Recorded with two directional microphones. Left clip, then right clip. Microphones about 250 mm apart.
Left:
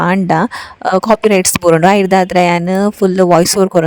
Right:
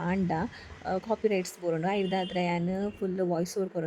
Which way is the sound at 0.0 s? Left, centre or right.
Left.